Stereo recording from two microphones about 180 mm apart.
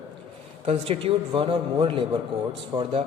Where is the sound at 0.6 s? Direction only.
30° right (ahead or behind).